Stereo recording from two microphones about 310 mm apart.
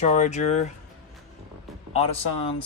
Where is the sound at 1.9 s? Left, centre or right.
Centre.